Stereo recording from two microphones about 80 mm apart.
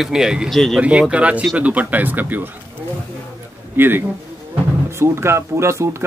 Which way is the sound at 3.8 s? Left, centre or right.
Right.